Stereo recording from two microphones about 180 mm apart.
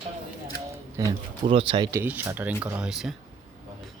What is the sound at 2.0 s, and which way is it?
Speech, 10° right (ahead or behind).